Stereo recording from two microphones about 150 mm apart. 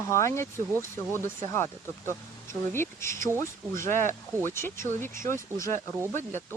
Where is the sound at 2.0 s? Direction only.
15° left (ahead or behind).